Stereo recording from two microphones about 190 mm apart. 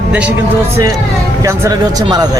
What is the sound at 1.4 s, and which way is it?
Speech, 15° right (ahead or behind).